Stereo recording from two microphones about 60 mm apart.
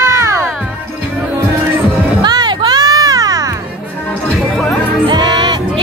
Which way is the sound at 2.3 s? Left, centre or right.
Right.